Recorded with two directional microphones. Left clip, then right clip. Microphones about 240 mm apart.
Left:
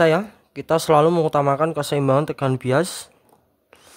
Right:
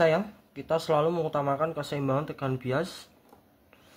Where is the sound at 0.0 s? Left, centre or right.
Left.